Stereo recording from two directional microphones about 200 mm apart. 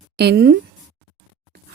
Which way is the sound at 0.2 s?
55° right (ahead or behind).